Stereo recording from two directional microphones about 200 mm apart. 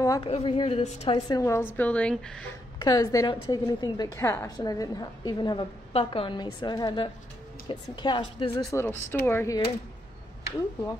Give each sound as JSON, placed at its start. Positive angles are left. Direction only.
{"t": 0.0, "sound": "a woman's voice", "side_deg": 15}
{"t": 0.3, "sound": "a woman's voice", "side_deg": 30}
{"t": 1.4, "sound": "a woman's voice", "side_deg": 10}
{"t": 2.8, "sound": "a woman's voice", "side_deg": 20}